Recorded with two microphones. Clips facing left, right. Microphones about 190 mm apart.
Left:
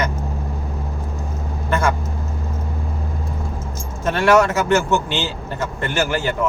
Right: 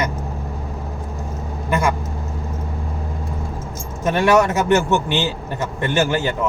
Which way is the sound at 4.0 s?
15° right (ahead or behind).